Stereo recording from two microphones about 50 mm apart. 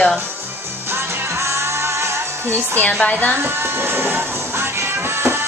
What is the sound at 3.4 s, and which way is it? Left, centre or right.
Music, right.